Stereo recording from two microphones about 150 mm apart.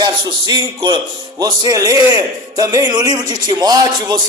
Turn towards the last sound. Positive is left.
turn(degrees=-25)  # may be behind; listen again after turning